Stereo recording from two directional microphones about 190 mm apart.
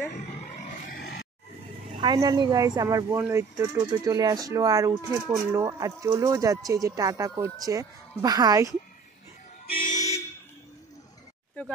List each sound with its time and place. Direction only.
0.8 s grunt: 50° left (ahead or behind)
2.0 s speech: 20° right (ahead or behind)
9.9 s vehicle: 15° left (ahead or behind)